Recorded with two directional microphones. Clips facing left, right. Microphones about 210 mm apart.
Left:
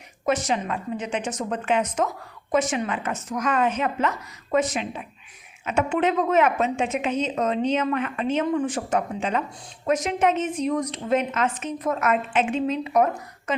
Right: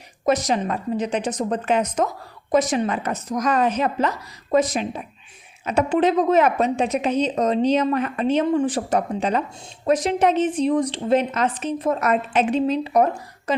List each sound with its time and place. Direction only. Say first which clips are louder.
0.3 s a woman's voice: right 4 dB; 40° right (ahead or behind)